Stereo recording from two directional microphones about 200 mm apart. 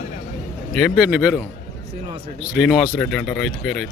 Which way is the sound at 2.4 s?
5° right (ahead or behind).